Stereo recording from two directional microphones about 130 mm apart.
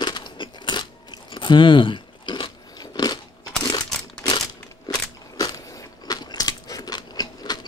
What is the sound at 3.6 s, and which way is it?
Crumpling, 35° left (ahead or behind).